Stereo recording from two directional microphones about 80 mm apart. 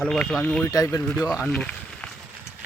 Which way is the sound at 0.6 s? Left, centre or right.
Left.